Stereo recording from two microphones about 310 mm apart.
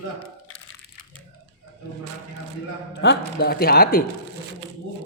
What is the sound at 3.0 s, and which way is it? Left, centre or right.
Speech, left.